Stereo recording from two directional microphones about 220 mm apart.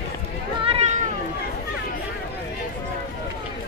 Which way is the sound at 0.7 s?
30° right (ahead or behind).